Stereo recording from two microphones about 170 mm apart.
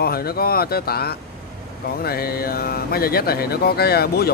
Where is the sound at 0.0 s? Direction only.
65° left (ahead or behind).